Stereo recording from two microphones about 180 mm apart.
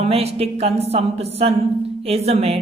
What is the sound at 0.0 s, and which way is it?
Speech, 35° right (ahead or behind).